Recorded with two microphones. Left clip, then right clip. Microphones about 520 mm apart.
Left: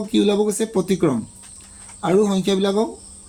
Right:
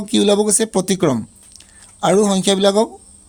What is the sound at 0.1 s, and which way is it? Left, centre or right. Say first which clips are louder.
Speech: right 4 dB; right.